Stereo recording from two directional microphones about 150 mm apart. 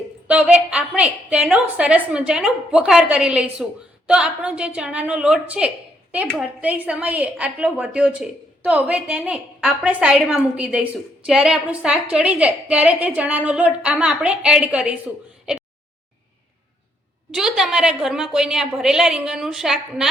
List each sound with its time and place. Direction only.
0.3 s a woman's voice: 10° right (ahead or behind)
17.3 s a woman's voice: 5° right (ahead or behind)